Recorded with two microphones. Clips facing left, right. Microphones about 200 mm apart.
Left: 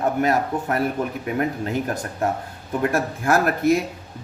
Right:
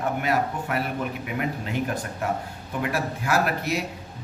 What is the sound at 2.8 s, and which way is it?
Speech, 50° left (ahead or behind).